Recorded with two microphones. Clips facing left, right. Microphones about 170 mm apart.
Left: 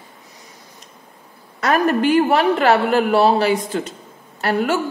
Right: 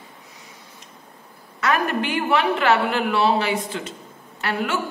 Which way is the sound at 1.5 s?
40° left (ahead or behind).